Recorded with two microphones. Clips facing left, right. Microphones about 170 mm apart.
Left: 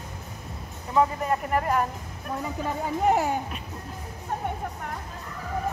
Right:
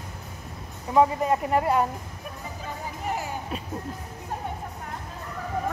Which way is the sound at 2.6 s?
60° left (ahead or behind).